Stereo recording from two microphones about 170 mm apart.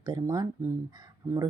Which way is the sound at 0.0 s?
25° right (ahead or behind).